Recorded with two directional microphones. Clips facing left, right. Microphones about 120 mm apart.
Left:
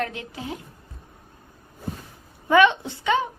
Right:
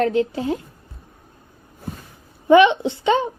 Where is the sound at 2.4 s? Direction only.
20° right (ahead or behind).